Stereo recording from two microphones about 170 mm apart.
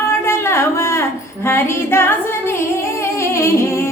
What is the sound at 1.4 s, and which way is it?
Female singing, 15° left (ahead or behind).